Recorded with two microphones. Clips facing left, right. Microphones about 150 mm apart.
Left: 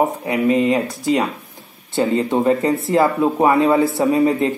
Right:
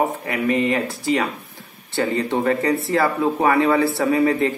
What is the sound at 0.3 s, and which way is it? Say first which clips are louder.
Speech: left 5 dB; 20° left (ahead or behind).